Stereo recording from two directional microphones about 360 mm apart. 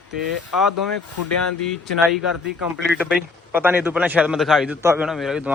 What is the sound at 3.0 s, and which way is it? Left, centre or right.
Speech, centre.